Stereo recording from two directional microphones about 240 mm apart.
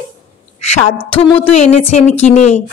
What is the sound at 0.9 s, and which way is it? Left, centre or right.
Speech, left.